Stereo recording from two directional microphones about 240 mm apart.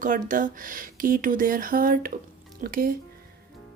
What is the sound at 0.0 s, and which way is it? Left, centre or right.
Speech, right.